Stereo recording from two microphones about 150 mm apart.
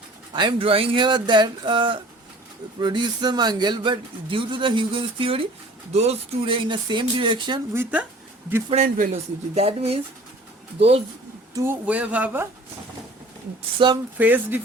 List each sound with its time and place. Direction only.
0.3 s speech: 35° right (ahead or behind)
7.7 s speech: 15° right (ahead or behind)
8.7 s speech: 55° right (ahead or behind)
11.5 s speech: 15° right (ahead or behind)
13.7 s speech: 30° right (ahead or behind)
14.2 s speech: 10° right (ahead or behind)